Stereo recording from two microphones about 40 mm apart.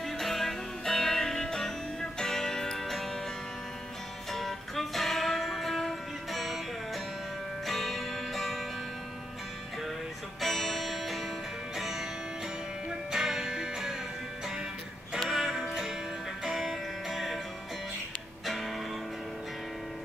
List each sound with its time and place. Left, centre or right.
0.2 s music: centre
4.3 s music: centre
7.6 s music: centre
10.4 s music: centre
13.1 s music: centre
15.2 s music: centre
18.4 s music: centre